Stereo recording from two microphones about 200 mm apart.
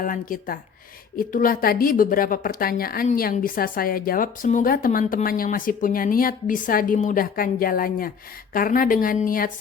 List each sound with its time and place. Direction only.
0.0 s speech: 45° left (ahead or behind)